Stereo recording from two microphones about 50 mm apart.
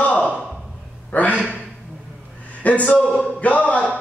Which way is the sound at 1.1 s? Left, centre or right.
Left.